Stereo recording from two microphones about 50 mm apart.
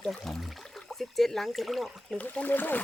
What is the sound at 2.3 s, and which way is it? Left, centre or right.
Speech, left.